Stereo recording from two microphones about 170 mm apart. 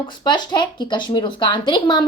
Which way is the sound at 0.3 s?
25° left (ahead or behind).